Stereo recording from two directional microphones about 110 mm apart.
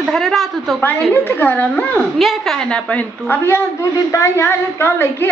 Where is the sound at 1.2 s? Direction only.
15° left (ahead or behind).